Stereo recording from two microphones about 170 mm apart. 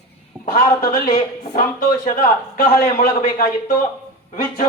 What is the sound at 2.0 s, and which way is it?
A man's voice, 55° left (ahead or behind).